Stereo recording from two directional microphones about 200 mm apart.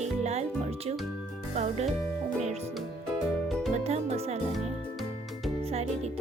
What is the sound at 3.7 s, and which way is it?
Music, 35° right (ahead or behind).